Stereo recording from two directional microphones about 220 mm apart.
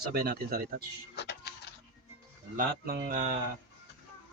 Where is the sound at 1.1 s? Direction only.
50° left (ahead or behind).